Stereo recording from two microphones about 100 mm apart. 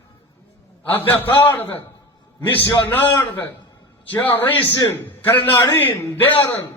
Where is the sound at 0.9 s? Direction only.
20° left (ahead or behind).